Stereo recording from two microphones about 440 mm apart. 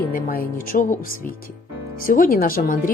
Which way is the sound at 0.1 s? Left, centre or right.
Centre.